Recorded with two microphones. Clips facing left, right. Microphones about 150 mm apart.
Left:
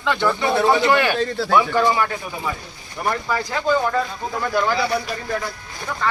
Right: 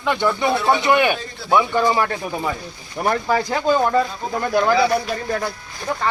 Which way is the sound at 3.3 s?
20° right (ahead or behind).